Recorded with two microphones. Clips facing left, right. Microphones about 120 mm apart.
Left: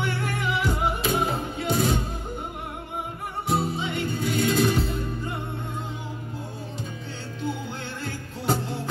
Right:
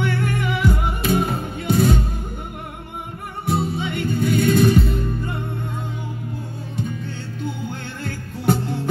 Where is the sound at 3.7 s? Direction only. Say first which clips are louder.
Right 5 dB; 55° right (ahead or behind).